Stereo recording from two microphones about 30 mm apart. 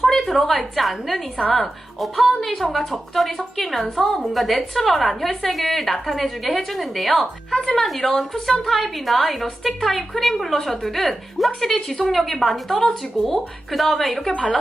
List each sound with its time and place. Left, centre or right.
0.0 s a woman's voice: centre
4.2 s a woman's voice: centre
7.5 s a woman's voice: centre